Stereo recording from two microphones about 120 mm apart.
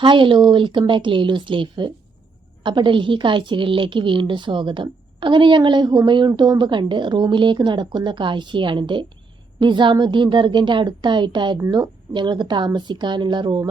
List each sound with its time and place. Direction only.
0.0 s a woman's voice: 45° right (ahead or behind)